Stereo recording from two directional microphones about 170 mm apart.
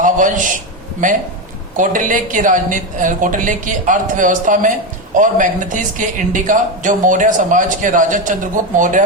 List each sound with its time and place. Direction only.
0.0 s a man's voice: 50° right (ahead or behind)